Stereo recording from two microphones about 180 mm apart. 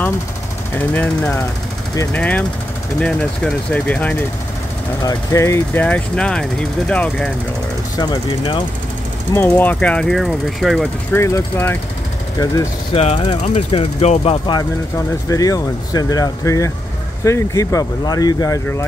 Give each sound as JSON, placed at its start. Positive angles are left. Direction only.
{"t": 0.7, "sound": "speech", "side_deg": 10}
{"t": 8.0, "sound": "speech", "side_deg": 25}
{"t": 9.3, "sound": "speech", "side_deg": 10}
{"t": 11.1, "sound": "speech", "side_deg": 15}
{"t": 12.9, "sound": "speech", "side_deg": 35}